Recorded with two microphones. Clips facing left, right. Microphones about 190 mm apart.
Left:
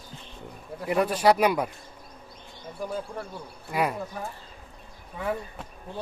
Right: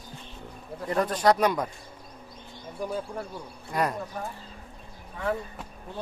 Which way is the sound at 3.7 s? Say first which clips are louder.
Left 1 dB; 5° left (ahead or behind).